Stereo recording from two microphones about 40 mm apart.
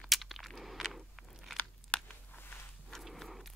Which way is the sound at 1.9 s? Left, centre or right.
Left.